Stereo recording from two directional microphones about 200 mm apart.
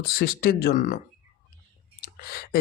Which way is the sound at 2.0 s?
50° left (ahead or behind).